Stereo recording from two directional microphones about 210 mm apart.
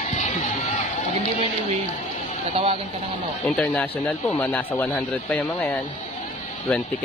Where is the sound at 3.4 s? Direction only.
5° left (ahead or behind).